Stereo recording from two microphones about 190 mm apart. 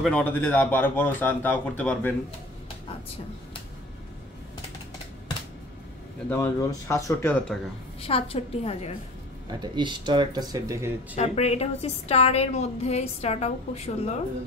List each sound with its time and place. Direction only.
0.0 s a man's voice: 10° left (ahead or behind)
6.3 s a man's voice: 15° left (ahead or behind)
8.0 s a woman's voice: 30° left (ahead or behind)
9.5 s speech: 25° right (ahead or behind)
11.1 s a woman's voice: 35° left (ahead or behind)